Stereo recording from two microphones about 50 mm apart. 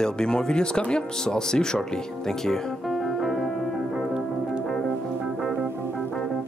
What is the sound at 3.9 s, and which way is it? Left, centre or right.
Music, centre.